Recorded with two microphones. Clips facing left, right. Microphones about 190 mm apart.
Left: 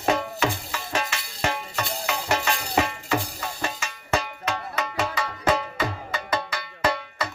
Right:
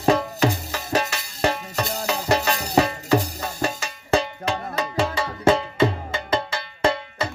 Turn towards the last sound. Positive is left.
turn(degrees=-25)  # may be behind; listen again after turning